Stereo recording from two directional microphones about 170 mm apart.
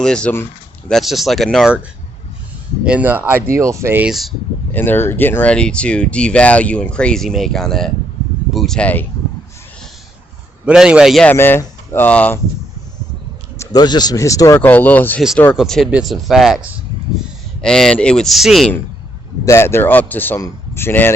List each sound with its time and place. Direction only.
0.0 s speech: 5° left (ahead or behind)
2.8 s speech: 10° right (ahead or behind)
4.1 s speech: centre (ahead or behind)
4.7 s speech: 10° left (ahead or behind)
10.7 s speech: 5° right (ahead or behind)
11.3 s speech: 15° left (ahead or behind)
13.6 s speech: 25° left (ahead or behind); by 16.6 s centre (ahead or behind)
17.6 s speech: 5° left (ahead or behind)
19.5 s speech: 15° left (ahead or behind)